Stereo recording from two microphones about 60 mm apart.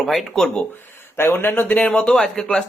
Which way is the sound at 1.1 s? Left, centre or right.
Left.